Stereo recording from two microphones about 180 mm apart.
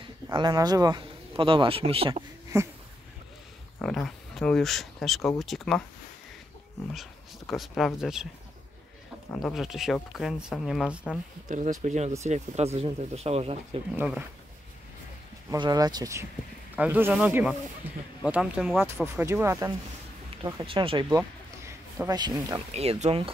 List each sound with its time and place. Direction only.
0.3 s speech: 25° right (ahead or behind)
2.5 s speech: 15° right (ahead or behind)
3.8 s speech: centre (ahead or behind)
6.9 s speech: centre (ahead or behind)
9.3 s speech: centre (ahead or behind)
11.4 s speech: 45° right (ahead or behind)
13.9 s speech: 5° right (ahead or behind)
15.5 s speech: 20° right (ahead or behind); by 18.9 s centre (ahead or behind)
18.9 s speech: 10° right (ahead or behind)
20.6 s speech: 30° right (ahead or behind)
21.2 s a sound: 15° right (ahead or behind)
22.7 s speech: 35° right (ahead or behind)